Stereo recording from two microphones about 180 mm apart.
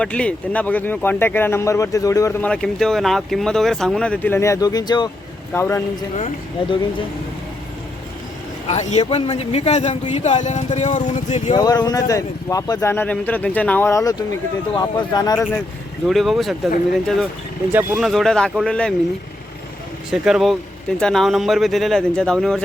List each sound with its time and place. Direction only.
0.0 s speech: 5° left (ahead or behind)
2.5 s speech: 5° left (ahead or behind)
6.1 s a man's voice: 35° left (ahead or behind)
8.6 s a man's voice: 40° left (ahead or behind)
9.0 s a man's voice: 30° left (ahead or behind)
11.5 s speech: 20° left (ahead or behind)
16.0 s speech: centre (ahead or behind)
17.7 s speech: 10° right (ahead or behind)
18.1 s speech: centre (ahead or behind)
20.1 s speech: 5° right (ahead or behind)